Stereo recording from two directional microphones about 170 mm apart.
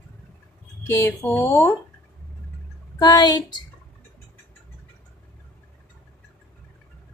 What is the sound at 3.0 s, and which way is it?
Speech, 25° left (ahead or behind).